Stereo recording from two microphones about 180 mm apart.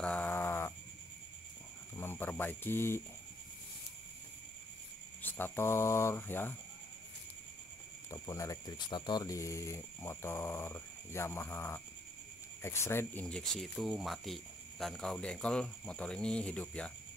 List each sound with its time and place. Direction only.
0.0 s sheep: 10° left (ahead or behind)
2.0 s speech: 10° left (ahead or behind)
5.2 s speech: 10° left (ahead or behind)
8.1 s speech: 20° left (ahead or behind)